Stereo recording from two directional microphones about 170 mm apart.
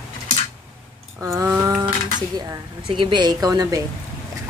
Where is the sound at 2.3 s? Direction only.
25° right (ahead or behind).